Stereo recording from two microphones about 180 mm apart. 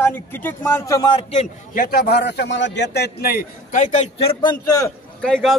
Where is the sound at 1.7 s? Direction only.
55° left (ahead or behind).